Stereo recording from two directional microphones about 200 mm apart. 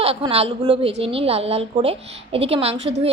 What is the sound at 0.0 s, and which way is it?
A woman's voice, 30° right (ahead or behind).